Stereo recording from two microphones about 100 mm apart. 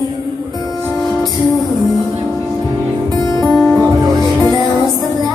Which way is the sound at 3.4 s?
5° right (ahead or behind).